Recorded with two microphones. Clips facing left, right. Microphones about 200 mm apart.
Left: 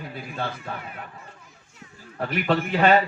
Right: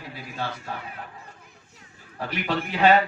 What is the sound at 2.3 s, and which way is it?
Speech, 55° left (ahead or behind).